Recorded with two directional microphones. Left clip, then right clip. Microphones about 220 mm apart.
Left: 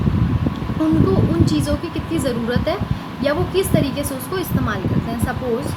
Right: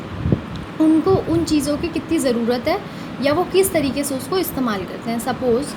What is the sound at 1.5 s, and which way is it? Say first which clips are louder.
A woman's voice: right 2 dB; 35° right (ahead or behind).